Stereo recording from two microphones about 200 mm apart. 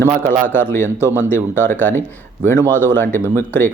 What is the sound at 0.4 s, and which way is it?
Speech, 10° left (ahead or behind).